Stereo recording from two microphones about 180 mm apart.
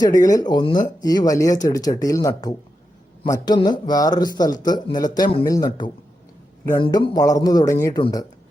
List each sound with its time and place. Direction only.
0.0 s speech: 20° left (ahead or behind)